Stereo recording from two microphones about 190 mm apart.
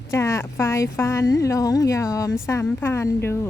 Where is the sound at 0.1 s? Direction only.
15° left (ahead or behind).